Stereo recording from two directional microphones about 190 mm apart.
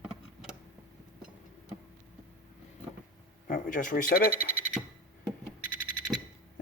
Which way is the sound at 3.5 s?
45° left (ahead or behind).